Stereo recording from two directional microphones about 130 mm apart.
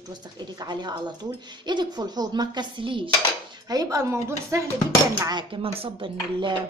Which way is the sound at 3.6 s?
25° right (ahead or behind).